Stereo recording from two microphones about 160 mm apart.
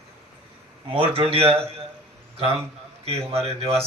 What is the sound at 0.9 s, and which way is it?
Speech, 35° right (ahead or behind).